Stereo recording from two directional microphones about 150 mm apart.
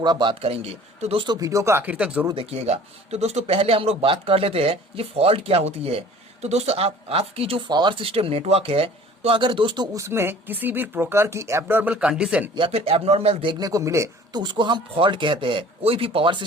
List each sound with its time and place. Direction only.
0.0 s speech: 30° right (ahead or behind); by 2.2 s 10° right (ahead or behind)
2.3 s a man's voice: 40° right (ahead or behind); by 12.5 s 5° right (ahead or behind)
12.5 s a man's voice: 40° right (ahead or behind)